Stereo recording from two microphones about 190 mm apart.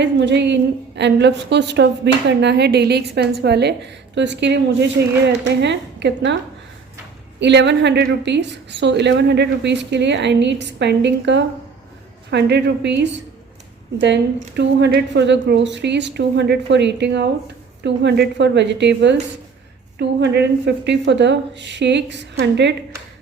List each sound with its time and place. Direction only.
0.0 s a woman's voice: 65° right (ahead or behind)
7.3 s a woman's voice: 65° right (ahead or behind)